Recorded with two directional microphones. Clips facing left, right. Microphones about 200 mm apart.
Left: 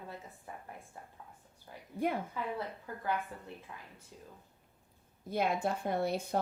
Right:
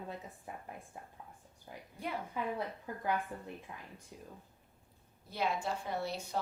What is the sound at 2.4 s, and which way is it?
A woman's voice, 15° right (ahead or behind).